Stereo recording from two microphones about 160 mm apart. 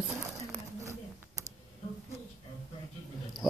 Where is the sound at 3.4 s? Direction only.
20° left (ahead or behind).